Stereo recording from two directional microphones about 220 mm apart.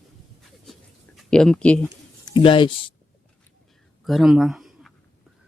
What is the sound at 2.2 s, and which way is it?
Speech, 20° left (ahead or behind).